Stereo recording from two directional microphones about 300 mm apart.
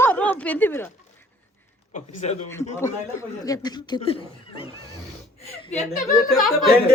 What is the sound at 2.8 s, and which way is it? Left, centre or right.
Speech, centre.